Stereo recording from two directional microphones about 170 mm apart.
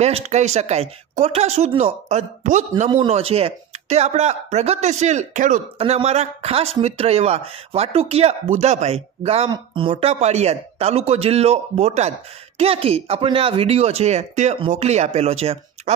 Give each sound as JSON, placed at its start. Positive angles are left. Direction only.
{"t": 0.0, "sound": "speech", "side_deg": -40}
{"t": 5.8, "sound": "speech", "side_deg": -35}